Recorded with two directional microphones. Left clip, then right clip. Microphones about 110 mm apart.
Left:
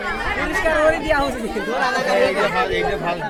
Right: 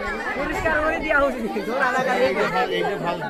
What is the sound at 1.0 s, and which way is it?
Speech, 45° left (ahead or behind).